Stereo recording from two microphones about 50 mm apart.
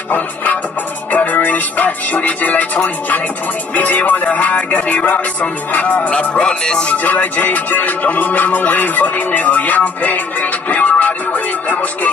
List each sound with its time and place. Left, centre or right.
1.1 s music: left
7.0 s music: left